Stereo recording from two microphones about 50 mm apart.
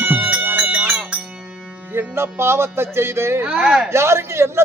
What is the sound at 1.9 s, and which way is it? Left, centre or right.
Music, right.